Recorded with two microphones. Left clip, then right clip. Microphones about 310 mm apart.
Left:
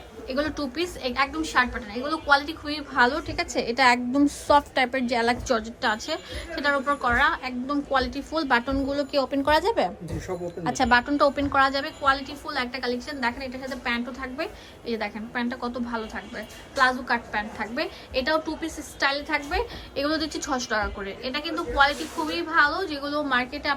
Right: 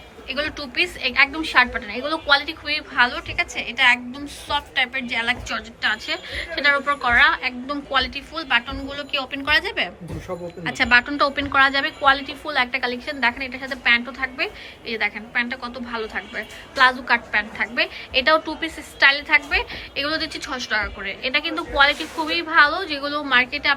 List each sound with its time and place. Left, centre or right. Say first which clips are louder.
0.3 s a woman's voice: right 2 dB; centre